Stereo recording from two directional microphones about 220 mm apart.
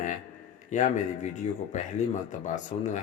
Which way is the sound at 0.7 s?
35° left (ahead or behind).